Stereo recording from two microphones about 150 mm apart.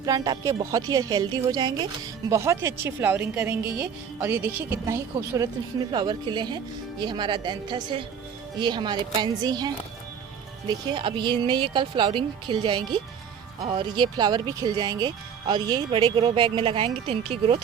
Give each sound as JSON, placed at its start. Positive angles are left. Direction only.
{"t": 0.0, "sound": "a woman's voice", "side_deg": -25}